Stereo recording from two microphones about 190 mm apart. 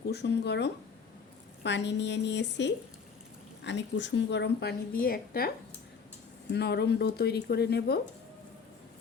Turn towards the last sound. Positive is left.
turn(degrees=60)  # may be behind; listen again after turning